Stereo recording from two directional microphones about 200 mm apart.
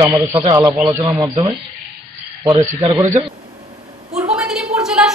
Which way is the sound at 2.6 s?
15° right (ahead or behind).